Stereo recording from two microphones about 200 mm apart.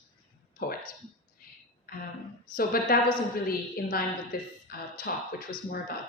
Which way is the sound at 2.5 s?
45° left (ahead or behind).